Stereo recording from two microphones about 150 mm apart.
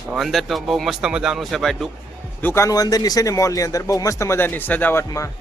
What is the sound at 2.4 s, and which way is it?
Speech, 15° left (ahead or behind).